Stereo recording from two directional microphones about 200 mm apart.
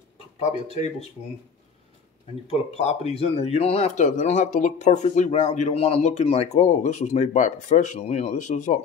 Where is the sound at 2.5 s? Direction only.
30° left (ahead or behind).